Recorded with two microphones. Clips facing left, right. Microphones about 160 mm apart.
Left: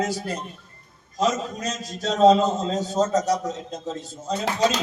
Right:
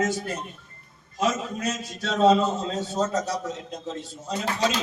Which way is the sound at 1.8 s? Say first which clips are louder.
Left 5 dB; 40° left (ahead or behind).